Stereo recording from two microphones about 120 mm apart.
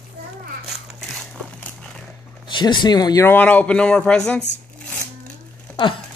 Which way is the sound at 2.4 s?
40° left (ahead or behind).